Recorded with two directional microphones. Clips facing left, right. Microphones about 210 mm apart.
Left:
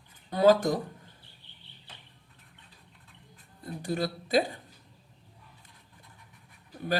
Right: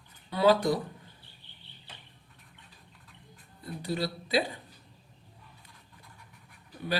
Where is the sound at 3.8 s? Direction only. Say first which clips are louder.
Left 1 dB; 50° left (ahead or behind).